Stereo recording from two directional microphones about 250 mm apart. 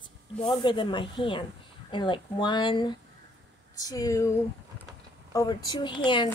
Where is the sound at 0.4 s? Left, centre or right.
Centre.